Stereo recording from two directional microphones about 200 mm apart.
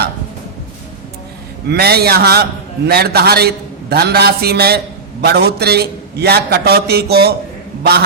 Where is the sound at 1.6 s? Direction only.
50° right (ahead or behind).